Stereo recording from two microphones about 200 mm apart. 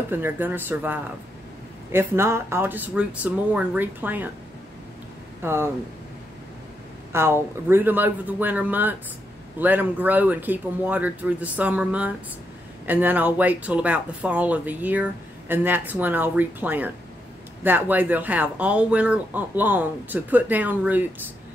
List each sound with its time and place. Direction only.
0.1 s speech: 10° right (ahead or behind)
5.4 s speech: 10° right (ahead or behind)
7.1 s a woman's voice: 10° right (ahead or behind)